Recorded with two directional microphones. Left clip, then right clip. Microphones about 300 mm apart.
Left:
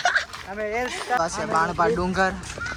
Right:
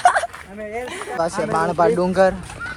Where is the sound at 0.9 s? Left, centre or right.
Centre.